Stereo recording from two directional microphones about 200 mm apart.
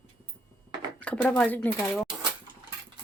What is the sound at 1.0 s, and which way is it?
Speech, 10° left (ahead or behind).